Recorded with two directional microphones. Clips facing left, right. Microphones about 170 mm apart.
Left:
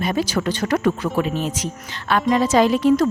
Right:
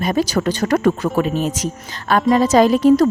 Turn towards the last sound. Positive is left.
turn(degrees=-40)  # may be behind; listen again after turning